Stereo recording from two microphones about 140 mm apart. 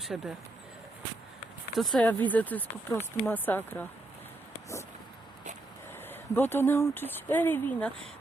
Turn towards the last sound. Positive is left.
turn(degrees=15)  # may be behind; listen again after turning